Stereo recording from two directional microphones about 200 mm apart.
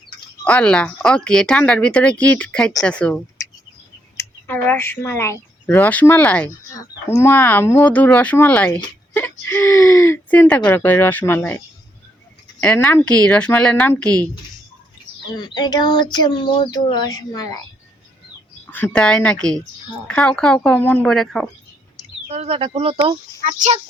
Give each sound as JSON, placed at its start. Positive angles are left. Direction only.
{"t": 0.4, "sound": "speech", "side_deg": 5}
{"t": 15.4, "sound": "speech", "side_deg": 20}
{"t": 18.6, "sound": "speech", "side_deg": 10}
{"t": 22.3, "sound": "speech", "side_deg": -30}
{"t": 23.4, "sound": "speech", "side_deg": -40}